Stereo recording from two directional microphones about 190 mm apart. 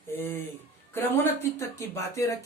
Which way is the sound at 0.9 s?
15° left (ahead or behind).